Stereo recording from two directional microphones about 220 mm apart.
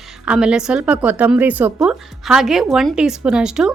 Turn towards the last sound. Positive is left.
turn(degrees=-5)  # may be behind; listen again after turning